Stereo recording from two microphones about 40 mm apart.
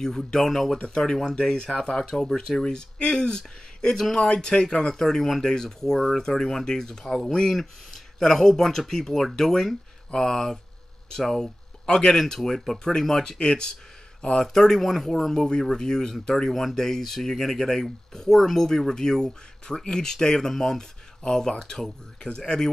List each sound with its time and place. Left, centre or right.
0.3 s speech: centre
0.7 s speech: left
3.9 s speech: centre
4.3 s speech: left
14.4 s speech: centre